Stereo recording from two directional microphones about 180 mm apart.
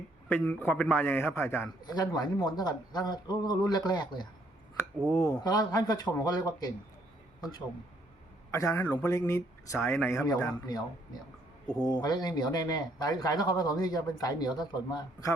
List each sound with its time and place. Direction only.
0.3 s a man's voice: 10° left (ahead or behind)
4.8 s a man's voice: 15° left (ahead or behind)
8.4 s a man's voice: 15° left (ahead or behind)